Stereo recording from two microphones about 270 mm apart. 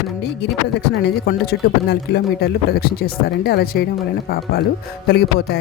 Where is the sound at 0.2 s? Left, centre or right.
Left.